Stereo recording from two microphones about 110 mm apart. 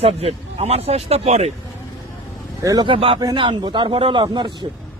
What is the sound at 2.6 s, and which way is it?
Speech, 30° right (ahead or behind).